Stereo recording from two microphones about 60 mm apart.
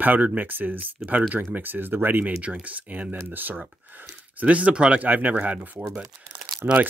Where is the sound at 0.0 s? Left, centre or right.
Right.